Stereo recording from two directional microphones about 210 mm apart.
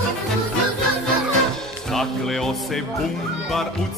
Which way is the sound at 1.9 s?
Centre (ahead or behind).